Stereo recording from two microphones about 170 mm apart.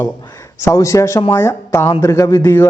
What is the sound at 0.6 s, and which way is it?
A man's voice, 20° left (ahead or behind).